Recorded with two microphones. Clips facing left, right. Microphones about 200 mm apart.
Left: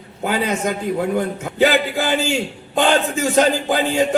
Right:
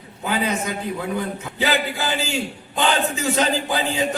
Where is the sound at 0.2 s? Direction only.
50° left (ahead or behind).